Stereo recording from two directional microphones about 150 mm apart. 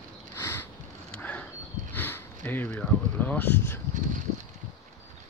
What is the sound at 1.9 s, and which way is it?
Sniff, 15° left (ahead or behind).